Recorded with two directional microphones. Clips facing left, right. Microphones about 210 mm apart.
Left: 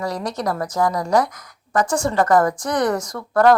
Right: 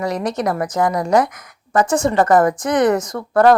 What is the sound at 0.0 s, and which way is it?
A woman's voice, 20° right (ahead or behind).